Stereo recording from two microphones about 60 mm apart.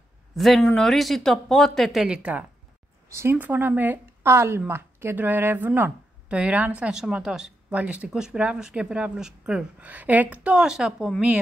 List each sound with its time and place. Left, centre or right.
0.4 s speech: centre
2.0 s speech: centre
3.1 s speech: right
3.3 s speech: right
5.1 s speech: right
6.2 s a woman's voice: right
7.7 s a woman's voice: right
9.8 s speech: right; by 11.1 s centre